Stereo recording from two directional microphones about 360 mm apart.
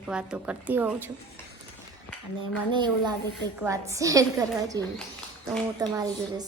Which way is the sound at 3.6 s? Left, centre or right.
Centre.